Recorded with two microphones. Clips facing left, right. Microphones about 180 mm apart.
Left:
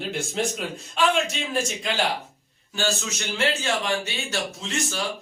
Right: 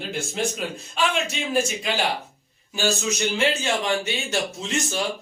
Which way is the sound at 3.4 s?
20° right (ahead or behind).